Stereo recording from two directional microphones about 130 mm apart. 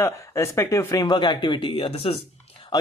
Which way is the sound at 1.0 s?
35° left (ahead or behind).